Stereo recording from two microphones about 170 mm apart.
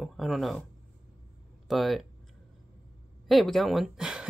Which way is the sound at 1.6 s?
Centre (ahead or behind).